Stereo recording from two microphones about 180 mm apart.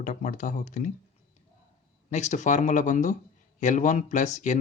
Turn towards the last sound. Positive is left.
turn(degrees=40)  # may be behind; listen again after turning